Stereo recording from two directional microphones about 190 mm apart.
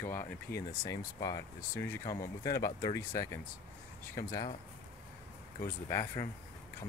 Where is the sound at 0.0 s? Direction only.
15° left (ahead or behind).